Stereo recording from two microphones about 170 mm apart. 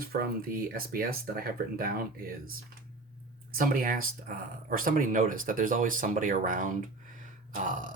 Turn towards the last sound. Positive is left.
turn(degrees=-50)  # may be behind; listen again after turning